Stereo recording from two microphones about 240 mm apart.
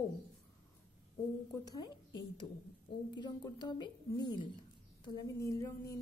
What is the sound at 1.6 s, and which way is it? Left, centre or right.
Speech, centre.